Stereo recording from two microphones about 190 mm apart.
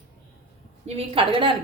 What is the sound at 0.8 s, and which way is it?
Speech, 30° right (ahead or behind).